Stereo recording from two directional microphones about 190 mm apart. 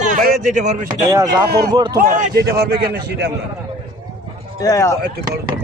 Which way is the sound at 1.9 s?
55° right (ahead or behind).